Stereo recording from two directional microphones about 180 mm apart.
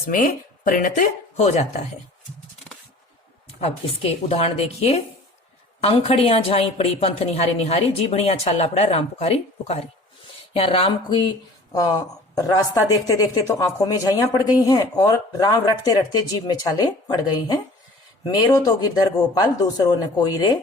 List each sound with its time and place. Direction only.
0.1 s speech: 50° left (ahead or behind)
2.7 s a sound: 10° left (ahead or behind)
3.6 s a woman's voice: 35° left (ahead or behind)